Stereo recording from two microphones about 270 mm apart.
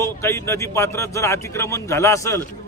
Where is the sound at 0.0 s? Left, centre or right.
Centre.